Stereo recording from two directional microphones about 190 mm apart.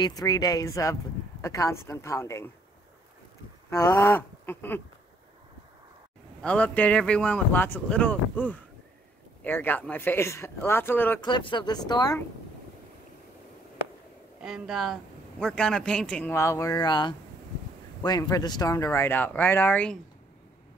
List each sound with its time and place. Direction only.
0.0 s speech: 20° left (ahead or behind)
3.7 s speech: 15° left (ahead or behind)
6.4 s speech: 5° left (ahead or behind)
11.1 s speech: 25° left (ahead or behind)
14.4 s speech: 5° right (ahead or behind)